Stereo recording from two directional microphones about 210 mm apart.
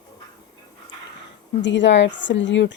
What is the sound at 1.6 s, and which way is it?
Speech, 60° left (ahead or behind).